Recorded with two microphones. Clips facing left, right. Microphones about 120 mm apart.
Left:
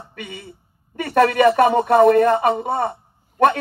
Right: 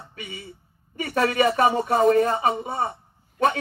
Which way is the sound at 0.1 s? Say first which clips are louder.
Left 3 dB; 60° left (ahead or behind).